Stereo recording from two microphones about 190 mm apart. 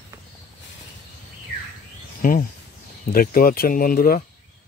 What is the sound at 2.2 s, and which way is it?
Speech, 45° left (ahead or behind).